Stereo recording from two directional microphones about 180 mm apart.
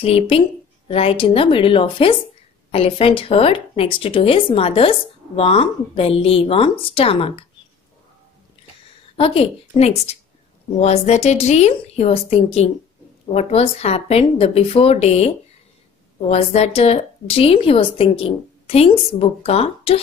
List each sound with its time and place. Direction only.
0.0 s a woman's voice: 30° left (ahead or behind)
9.1 s speech: 30° left (ahead or behind)